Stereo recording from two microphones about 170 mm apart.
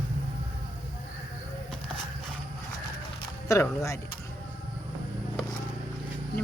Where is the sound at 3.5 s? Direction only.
15° left (ahead or behind).